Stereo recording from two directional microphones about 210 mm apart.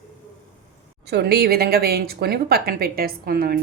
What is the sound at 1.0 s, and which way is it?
A woman's voice, 50° right (ahead or behind).